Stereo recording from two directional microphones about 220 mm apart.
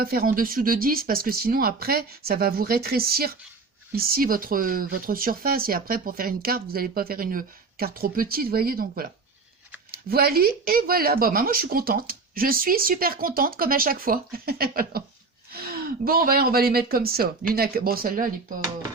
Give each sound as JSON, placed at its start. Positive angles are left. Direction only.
{"t": 0.0, "sound": "speech", "side_deg": -40}
{"t": 10.1, "sound": "speech", "side_deg": -45}